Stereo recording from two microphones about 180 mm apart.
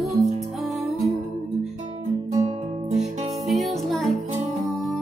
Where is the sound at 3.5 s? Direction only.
Centre (ahead or behind).